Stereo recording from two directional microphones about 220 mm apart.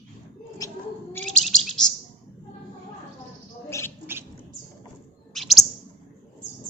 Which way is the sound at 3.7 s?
15° left (ahead or behind).